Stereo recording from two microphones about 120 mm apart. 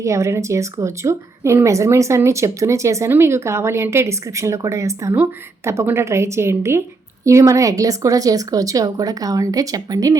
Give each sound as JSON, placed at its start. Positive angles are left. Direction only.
{"t": 0.0, "sound": "a woman's voice", "side_deg": -25}